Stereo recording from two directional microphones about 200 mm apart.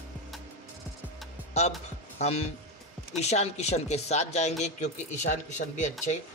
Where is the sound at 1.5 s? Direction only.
35° left (ahead or behind).